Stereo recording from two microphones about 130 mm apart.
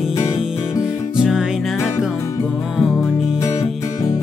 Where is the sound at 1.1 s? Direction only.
5° right (ahead or behind).